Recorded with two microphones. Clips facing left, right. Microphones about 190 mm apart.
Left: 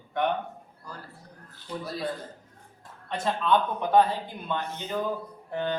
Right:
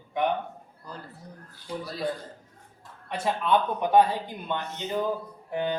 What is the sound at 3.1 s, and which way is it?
Speech, 10° right (ahead or behind).